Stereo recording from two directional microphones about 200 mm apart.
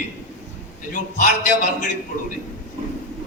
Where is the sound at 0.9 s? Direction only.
40° left (ahead or behind).